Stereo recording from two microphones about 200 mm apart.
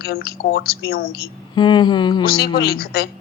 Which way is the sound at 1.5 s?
20° left (ahead or behind).